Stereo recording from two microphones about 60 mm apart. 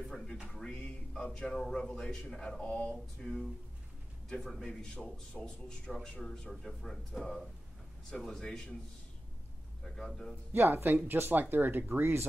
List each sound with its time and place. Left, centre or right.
0.7 s a man's voice: centre
2.6 s a sound: centre
3.2 s a man's voice: centre
9.8 s speech: centre
10.5 s speech: right